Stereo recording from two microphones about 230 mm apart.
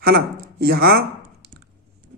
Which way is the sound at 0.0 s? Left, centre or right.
Right.